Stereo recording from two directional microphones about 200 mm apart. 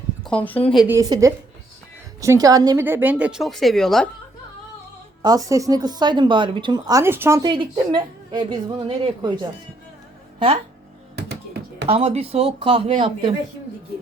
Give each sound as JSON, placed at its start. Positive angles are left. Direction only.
{"t": 0.3, "sound": "speech", "side_deg": 5}
{"t": 0.9, "sound": "a woman's voice", "side_deg": -15}
{"t": 5.2, "sound": "speech", "side_deg": -20}
{"t": 11.3, "sound": "a sound", "side_deg": -55}
{"t": 11.9, "sound": "speech", "side_deg": -30}